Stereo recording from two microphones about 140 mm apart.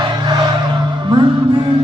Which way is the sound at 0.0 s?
30° right (ahead or behind).